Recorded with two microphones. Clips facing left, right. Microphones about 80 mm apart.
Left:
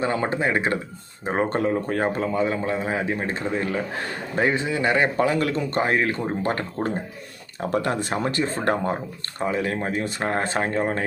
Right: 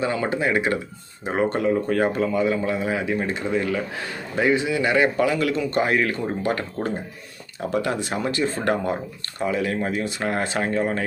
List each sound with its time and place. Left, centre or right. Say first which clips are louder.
0.0 s speech: even; left